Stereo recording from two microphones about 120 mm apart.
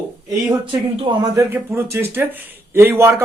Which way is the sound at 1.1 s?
45° right (ahead or behind).